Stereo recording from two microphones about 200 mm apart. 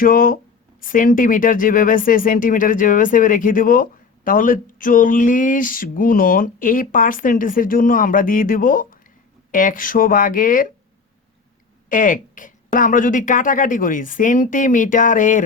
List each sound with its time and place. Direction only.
0.0 s speech: 45° left (ahead or behind)
11.9 s speech: 40° left (ahead or behind)